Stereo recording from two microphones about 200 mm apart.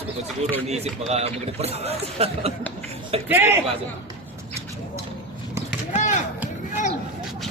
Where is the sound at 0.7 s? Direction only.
35° right (ahead or behind).